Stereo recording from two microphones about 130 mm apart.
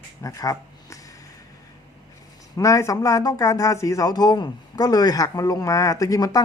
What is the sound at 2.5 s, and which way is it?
Speech, 25° left (ahead or behind).